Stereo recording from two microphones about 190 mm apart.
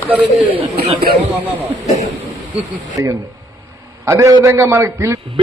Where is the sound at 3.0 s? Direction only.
15° right (ahead or behind).